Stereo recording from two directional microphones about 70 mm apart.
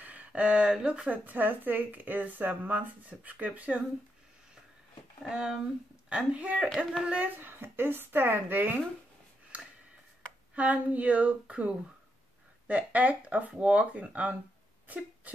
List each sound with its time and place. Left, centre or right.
0.0 s speech: right
5.2 s a woman's voice: centre; by 8.8 s right
10.5 s speech: right
15.3 s a sound: right